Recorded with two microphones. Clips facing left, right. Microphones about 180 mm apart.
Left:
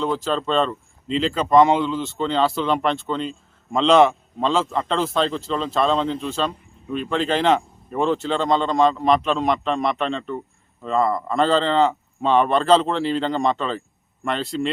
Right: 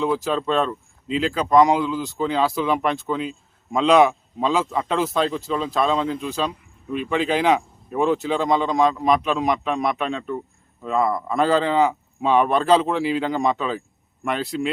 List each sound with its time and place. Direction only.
0.0 s speech: 5° right (ahead or behind)